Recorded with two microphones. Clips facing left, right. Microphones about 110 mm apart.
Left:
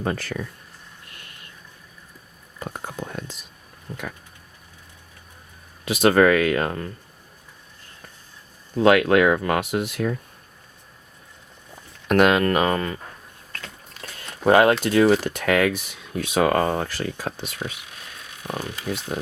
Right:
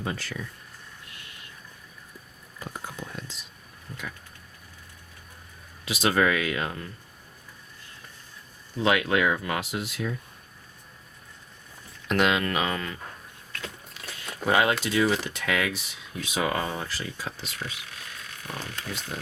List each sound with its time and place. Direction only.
0.0 s speech: 50° left (ahead or behind)
2.6 s whispering: 55° left (ahead or behind)
5.8 s speech: 55° left (ahead or behind)
8.8 s speech: 60° left (ahead or behind)
12.0 s speech: 50° left (ahead or behind)
14.0 s a sound: 50° left (ahead or behind)
14.4 s speech: 55° left (ahead or behind)
19.1 s speech: 55° left (ahead or behind)